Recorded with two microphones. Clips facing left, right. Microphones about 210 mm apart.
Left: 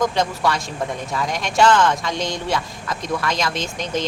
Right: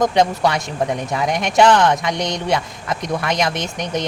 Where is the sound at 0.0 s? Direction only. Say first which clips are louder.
Right 4 dB; 20° right (ahead or behind).